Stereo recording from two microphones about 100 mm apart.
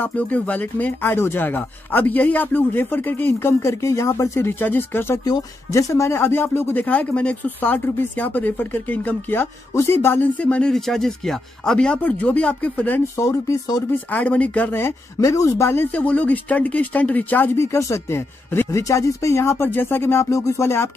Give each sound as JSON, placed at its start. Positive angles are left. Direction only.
{"t": 0.0, "sound": "speech", "side_deg": 15}
{"t": 5.2, "sound": "speech", "side_deg": 35}
{"t": 13.2, "sound": "speech", "side_deg": 30}
{"t": 14.1, "sound": "speech", "side_deg": 15}
{"t": 15.1, "sound": "speech", "side_deg": 35}
{"t": 17.7, "sound": "speech", "side_deg": 30}